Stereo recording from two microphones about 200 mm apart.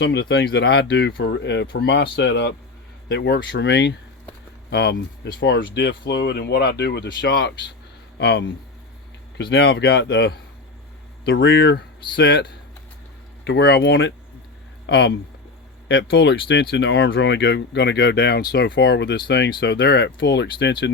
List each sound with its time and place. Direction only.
0.0 s speech: 60° left (ahead or behind)
9.5 s speech: 65° left (ahead or behind)